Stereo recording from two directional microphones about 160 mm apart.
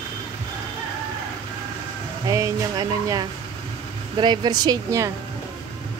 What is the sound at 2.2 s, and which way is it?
Speech, 20° right (ahead or behind).